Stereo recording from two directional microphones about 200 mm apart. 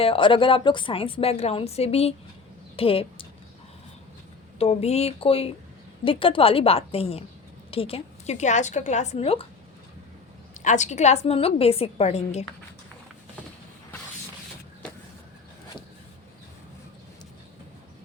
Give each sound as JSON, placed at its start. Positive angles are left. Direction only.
{"t": 0.0, "sound": "a woman's voice", "side_deg": 25}
{"t": 4.5, "sound": "a woman's voice", "side_deg": 30}
{"t": 10.6, "sound": "a woman's voice", "side_deg": 35}